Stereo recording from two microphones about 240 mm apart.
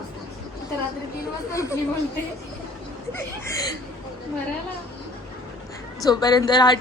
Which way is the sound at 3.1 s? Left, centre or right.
Centre.